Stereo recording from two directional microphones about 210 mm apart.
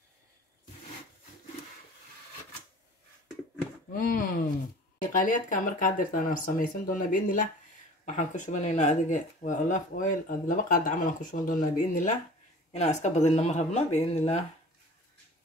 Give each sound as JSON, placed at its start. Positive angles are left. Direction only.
{"t": 3.9, "sound": "speech", "side_deg": 40}